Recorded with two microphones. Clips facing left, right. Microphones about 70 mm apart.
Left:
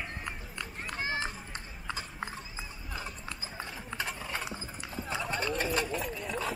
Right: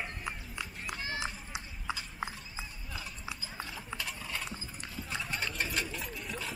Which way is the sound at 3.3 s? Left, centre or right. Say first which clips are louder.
Left 1 dB; left.